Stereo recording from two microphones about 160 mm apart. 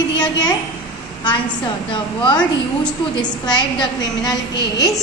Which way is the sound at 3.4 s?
25° left (ahead or behind).